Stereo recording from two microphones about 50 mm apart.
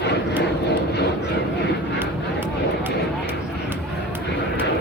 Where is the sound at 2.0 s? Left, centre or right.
Right.